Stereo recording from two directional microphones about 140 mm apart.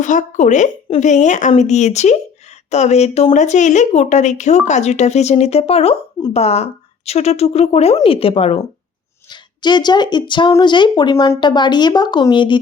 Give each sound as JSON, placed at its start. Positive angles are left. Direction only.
{"t": 0.0, "sound": "a woman's voice", "side_deg": 65}
{"t": 9.3, "sound": "speech", "side_deg": 30}